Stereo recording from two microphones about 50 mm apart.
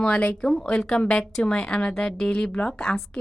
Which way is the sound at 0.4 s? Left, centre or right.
Centre.